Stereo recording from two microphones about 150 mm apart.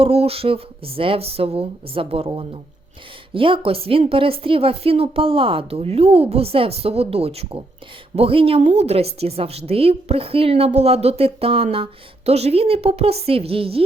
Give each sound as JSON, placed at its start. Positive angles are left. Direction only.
{"t": 0.0, "sound": "a woman's voice", "side_deg": -40}